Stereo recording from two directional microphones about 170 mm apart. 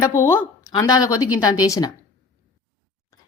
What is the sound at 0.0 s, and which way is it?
A woman's voice, 15° left (ahead or behind).